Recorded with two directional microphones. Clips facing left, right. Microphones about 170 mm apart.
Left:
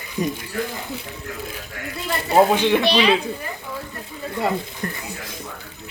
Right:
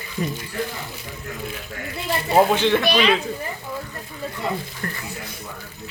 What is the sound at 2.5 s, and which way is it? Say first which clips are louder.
Speech: left 1 dB; 15° left (ahead or behind).